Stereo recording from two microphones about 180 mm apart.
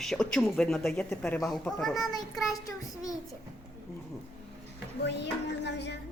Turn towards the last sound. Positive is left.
turn(degrees=70)  # may be behind; listen again after turning